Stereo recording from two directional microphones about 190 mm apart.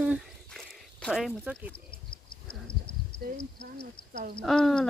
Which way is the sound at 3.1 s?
50° left (ahead or behind).